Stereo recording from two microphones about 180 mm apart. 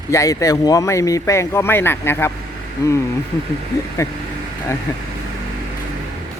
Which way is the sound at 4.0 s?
15° left (ahead or behind).